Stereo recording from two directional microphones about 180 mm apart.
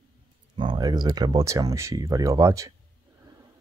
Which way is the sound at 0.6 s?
25° right (ahead or behind).